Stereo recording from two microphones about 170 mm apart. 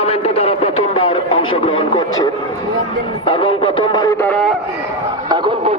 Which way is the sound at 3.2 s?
30° left (ahead or behind).